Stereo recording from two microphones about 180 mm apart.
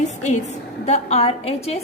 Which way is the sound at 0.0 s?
40° left (ahead or behind).